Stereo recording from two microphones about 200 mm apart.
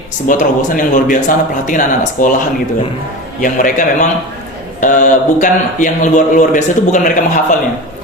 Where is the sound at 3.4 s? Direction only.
40° left (ahead or behind).